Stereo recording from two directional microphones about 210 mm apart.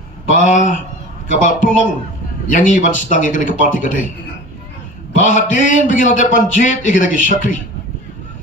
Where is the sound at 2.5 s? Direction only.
35° left (ahead or behind).